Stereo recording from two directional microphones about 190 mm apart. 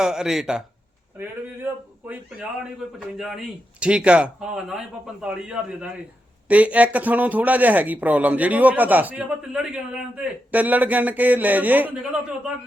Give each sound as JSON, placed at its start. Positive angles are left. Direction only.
{"t": 0.0, "sound": "a man's voice", "side_deg": -5}